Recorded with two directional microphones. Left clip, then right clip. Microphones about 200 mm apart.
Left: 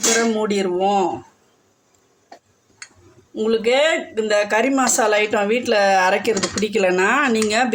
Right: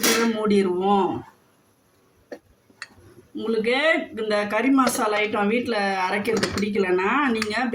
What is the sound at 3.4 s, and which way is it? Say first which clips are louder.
Speech: left 4 dB; 40° left (ahead or behind).